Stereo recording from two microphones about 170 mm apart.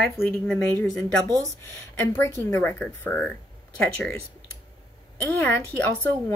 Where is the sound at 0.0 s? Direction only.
5° left (ahead or behind).